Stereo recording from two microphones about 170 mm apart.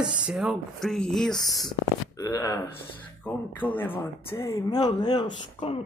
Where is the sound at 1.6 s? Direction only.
20° left (ahead or behind).